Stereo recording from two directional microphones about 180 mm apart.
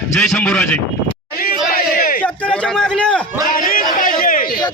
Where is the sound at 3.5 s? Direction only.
50° left (ahead or behind).